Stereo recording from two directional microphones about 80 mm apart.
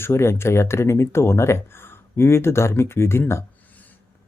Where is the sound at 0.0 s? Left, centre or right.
Left.